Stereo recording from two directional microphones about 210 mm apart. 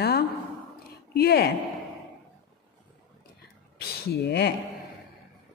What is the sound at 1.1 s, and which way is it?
Speech, 50° left (ahead or behind).